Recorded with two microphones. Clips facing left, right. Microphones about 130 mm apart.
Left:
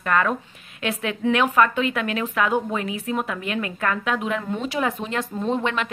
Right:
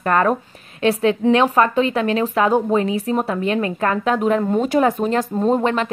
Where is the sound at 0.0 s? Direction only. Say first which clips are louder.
Right 5 dB; 40° right (ahead or behind).